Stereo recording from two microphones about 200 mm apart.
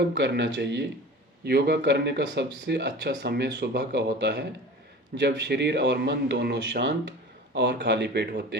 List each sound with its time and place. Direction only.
0.2 s speech: 60° right (ahead or behind)